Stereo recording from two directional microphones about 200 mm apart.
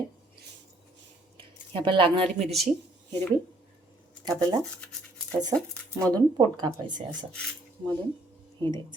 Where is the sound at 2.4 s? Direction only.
Centre (ahead or behind).